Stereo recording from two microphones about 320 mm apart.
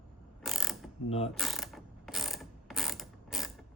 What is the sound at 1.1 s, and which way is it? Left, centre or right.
Speech, centre.